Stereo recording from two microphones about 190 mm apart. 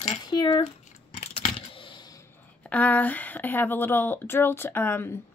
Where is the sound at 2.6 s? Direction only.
5° left (ahead or behind).